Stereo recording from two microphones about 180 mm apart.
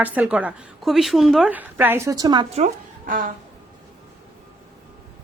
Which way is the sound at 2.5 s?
40° right (ahead or behind).